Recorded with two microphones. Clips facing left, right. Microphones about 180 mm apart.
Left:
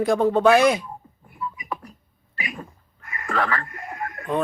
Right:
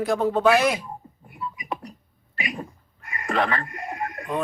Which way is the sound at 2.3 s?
25° right (ahead or behind).